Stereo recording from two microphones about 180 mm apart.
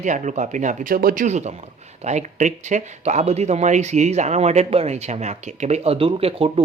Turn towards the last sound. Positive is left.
turn(degrees=-30)  # may be behind; listen again after turning